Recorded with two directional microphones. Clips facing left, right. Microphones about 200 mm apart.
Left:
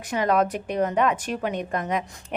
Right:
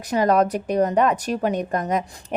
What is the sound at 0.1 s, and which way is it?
A woman's voice, 40° right (ahead or behind).